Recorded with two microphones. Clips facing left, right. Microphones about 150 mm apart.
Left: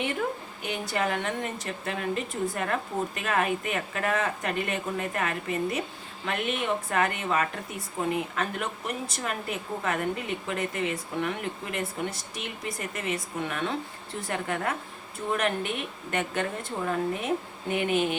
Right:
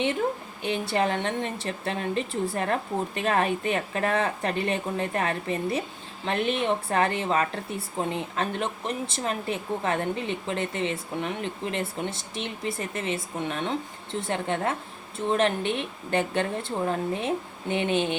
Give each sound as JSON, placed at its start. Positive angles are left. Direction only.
{"t": 0.6, "sound": "a woman's voice", "side_deg": -30}